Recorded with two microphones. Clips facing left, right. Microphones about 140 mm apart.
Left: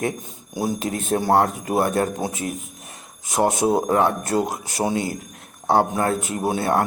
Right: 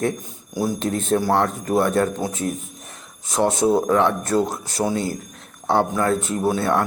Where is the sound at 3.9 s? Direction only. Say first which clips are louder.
Right 1 dB; 40° left (ahead or behind).